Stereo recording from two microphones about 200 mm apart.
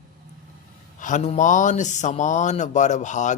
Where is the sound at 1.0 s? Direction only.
40° left (ahead or behind).